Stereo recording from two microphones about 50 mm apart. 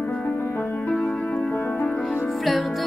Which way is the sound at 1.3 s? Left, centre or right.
Left.